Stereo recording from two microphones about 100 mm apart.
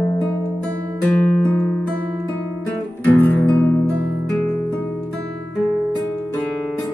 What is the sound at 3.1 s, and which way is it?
Music, 15° left (ahead or behind).